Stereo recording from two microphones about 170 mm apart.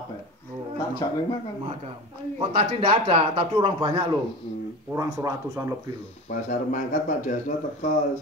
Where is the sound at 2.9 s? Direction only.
30° right (ahead or behind).